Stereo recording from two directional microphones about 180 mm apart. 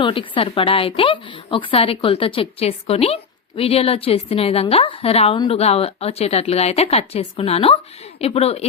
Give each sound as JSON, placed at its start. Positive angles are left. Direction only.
{"t": 0.0, "sound": "a woman's voice", "side_deg": 30}